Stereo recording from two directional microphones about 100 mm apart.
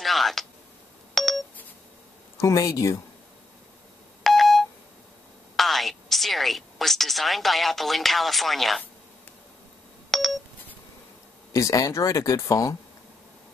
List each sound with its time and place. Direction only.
0.0 s a sound: centre (ahead or behind)
1.1 s telephone dialing: centre (ahead or behind)
2.3 s speech: 35° left (ahead or behind)
4.2 s telephone dialing: centre (ahead or behind)
5.6 s speech: centre (ahead or behind)
10.1 s telephone dialing: centre (ahead or behind)
11.5 s speech: 35° left (ahead or behind)